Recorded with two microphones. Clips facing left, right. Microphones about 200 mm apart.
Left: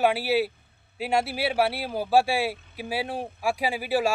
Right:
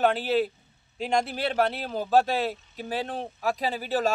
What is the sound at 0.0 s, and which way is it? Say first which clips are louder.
A man's voice: left 1 dB; 10° left (ahead or behind).